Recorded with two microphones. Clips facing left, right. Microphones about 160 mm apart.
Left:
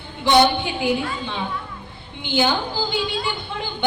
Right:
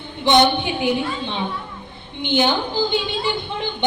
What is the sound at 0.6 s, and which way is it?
A woman's voice, 20° right (ahead or behind).